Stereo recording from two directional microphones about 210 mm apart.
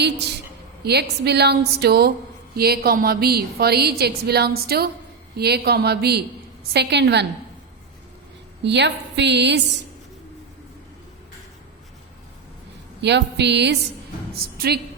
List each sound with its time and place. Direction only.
0.0 s a woman's voice: 55° right (ahead or behind)
8.6 s a woman's voice: 55° right (ahead or behind)
13.0 s a woman's voice: 55° right (ahead or behind)